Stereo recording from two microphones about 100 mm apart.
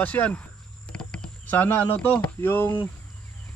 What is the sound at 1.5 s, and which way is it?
Speech, 20° left (ahead or behind).